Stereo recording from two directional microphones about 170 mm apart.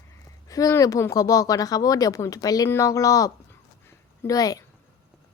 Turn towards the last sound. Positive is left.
turn(degrees=20)  # may be behind; listen again after turning